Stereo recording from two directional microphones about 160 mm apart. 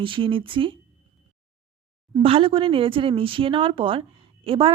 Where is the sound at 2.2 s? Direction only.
35° right (ahead or behind).